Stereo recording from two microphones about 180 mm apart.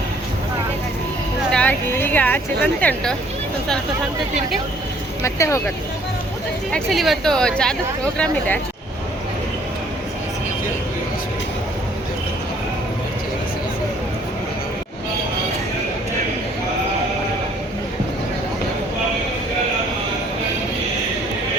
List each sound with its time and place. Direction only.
1.5 s a woman's voice: 10° left (ahead or behind)
5.2 s speech: 15° left (ahead or behind)
6.7 s speech: centre (ahead or behind)